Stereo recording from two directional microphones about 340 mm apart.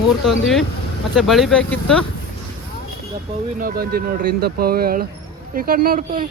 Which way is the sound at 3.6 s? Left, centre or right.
Right.